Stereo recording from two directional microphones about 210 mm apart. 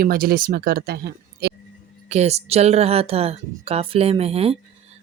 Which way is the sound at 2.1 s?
30° right (ahead or behind).